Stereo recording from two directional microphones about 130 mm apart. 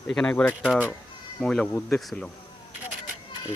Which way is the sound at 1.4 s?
5° left (ahead or behind).